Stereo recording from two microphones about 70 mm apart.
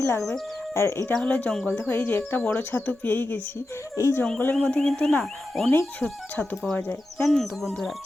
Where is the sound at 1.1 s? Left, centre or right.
Centre.